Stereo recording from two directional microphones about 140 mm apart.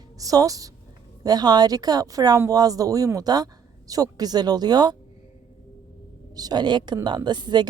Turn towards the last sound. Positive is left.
turn(degrees=-30)  # may be behind; listen again after turning